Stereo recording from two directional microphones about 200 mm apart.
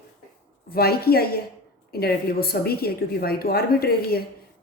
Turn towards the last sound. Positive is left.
turn(degrees=50)  # may be behind; listen again after turning